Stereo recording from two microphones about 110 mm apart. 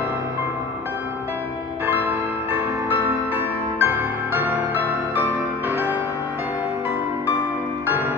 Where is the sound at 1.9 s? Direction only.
15° right (ahead or behind).